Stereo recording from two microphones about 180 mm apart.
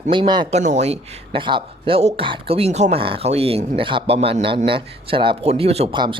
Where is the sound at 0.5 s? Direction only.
40° right (ahead or behind).